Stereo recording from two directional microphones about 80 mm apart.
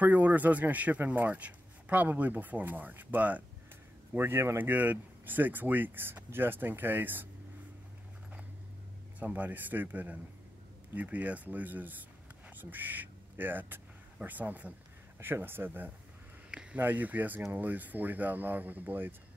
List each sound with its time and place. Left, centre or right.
0.0 s a man's voice: right
4.1 s a man's voice: right
9.2 s a man's voice: right
16.4 s a sound: centre
16.8 s a man's voice: right